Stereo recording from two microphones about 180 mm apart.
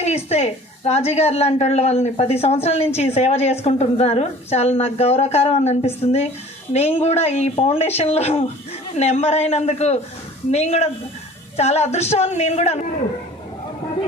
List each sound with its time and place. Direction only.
0.3 s a woman's voice: 35° left (ahead or behind)